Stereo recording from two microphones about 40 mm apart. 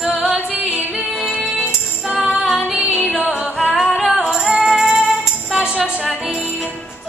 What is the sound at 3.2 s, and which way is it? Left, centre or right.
Music, right.